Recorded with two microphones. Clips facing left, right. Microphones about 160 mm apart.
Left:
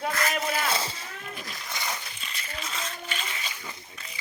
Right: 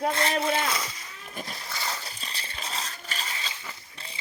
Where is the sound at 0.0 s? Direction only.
30° right (ahead or behind).